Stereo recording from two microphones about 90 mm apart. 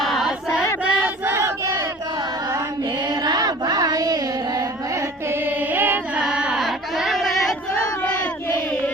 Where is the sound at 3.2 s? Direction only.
45° right (ahead or behind).